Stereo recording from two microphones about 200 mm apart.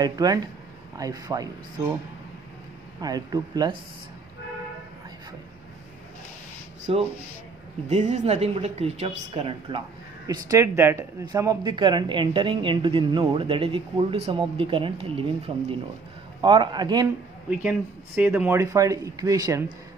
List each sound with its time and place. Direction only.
0.0 s speech: 20° right (ahead or behind)
3.0 s speech: 20° right (ahead or behind)
6.9 s speech: 30° right (ahead or behind)
10.2 s speech: 15° right (ahead or behind)
17.5 s speech: 5° right (ahead or behind)